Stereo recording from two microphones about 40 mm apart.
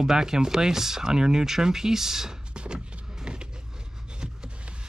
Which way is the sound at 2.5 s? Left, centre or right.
Right.